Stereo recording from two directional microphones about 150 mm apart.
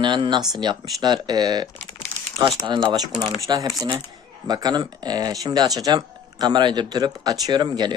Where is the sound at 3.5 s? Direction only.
30° right (ahead or behind).